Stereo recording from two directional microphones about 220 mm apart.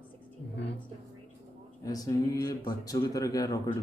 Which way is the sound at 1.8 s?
15° left (ahead or behind).